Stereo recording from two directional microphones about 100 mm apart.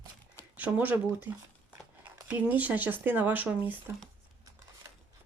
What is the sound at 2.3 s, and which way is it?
Speech, 15° right (ahead or behind).